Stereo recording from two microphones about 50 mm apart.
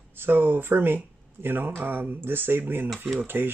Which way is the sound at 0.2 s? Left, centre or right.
Right.